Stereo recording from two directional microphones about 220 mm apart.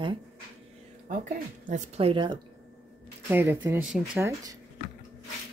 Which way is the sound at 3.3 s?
10° right (ahead or behind).